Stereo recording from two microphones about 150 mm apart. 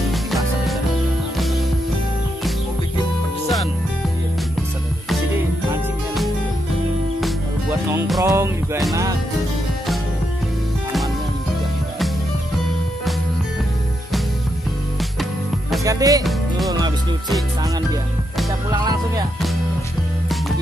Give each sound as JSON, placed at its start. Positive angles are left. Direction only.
{"t": 0.1, "sound": "music", "side_deg": 0}
{"t": 8.2, "sound": "music", "side_deg": -25}
{"t": 15.8, "sound": "music", "side_deg": -25}
{"t": 16.3, "sound": "music", "side_deg": 0}
{"t": 18.7, "sound": "music", "side_deg": -25}